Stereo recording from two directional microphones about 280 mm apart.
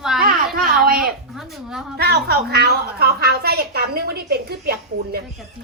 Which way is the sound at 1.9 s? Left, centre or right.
Right.